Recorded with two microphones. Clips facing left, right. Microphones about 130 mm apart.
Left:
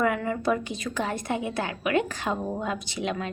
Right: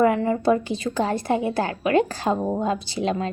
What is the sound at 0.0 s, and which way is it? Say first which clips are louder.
A woman's voice: right 6 dB; 30° right (ahead or behind).